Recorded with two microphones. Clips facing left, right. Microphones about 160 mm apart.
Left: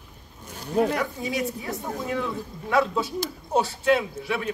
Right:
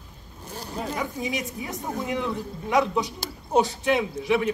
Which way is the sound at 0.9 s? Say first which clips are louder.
Left 2 dB; 20° right (ahead or behind).